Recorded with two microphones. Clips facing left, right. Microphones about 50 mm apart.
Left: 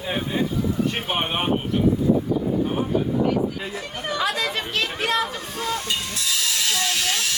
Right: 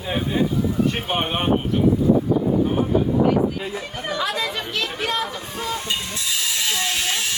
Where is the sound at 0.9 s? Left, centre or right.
Centre.